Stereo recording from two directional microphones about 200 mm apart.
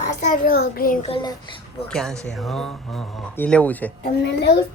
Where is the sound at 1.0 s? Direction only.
25° left (ahead or behind).